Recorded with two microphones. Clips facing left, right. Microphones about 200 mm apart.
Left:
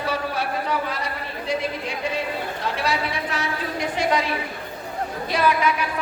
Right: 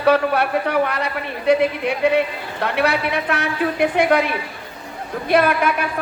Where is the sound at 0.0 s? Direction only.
65° right (ahead or behind).